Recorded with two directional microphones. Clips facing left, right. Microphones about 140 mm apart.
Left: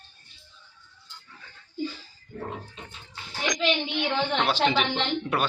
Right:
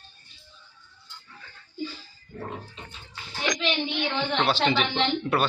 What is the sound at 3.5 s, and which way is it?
A woman's voice, 10° left (ahead or behind).